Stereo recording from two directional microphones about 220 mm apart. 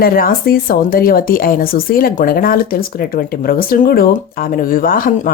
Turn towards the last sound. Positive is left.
turn(degrees=40)  # may be behind; listen again after turning